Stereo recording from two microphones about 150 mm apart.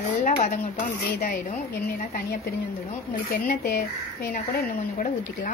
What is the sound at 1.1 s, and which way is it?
A woman's voice, 80° left.